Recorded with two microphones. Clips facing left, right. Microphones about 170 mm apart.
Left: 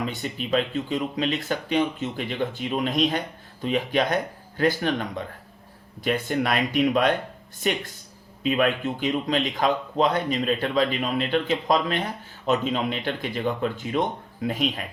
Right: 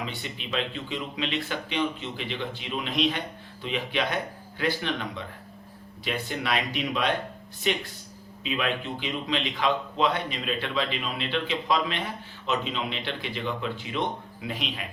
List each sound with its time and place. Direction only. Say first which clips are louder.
0.0 s speech: left 6 dB; 45° left (ahead or behind)